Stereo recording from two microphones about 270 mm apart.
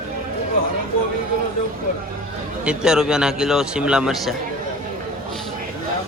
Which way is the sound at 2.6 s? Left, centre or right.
Centre.